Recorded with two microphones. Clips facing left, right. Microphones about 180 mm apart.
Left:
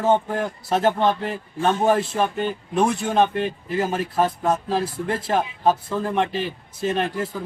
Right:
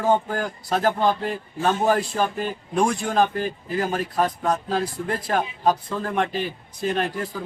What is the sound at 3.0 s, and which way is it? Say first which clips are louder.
Speech: left 2 dB; 25° left (ahead or behind).